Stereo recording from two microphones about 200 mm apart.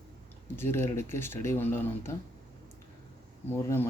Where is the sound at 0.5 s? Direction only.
10° left (ahead or behind).